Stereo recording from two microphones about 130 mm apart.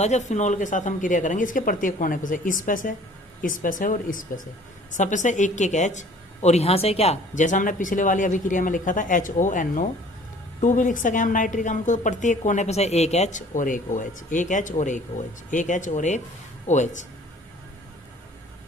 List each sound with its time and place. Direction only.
0.0 s speech: 60° left (ahead or behind); by 4.3 s 90° left
4.9 s a woman's voice: 75° left (ahead or behind)